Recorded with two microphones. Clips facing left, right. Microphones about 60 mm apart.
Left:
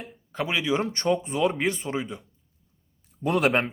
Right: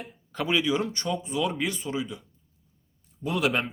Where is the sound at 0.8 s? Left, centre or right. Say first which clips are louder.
Left 5 dB; left.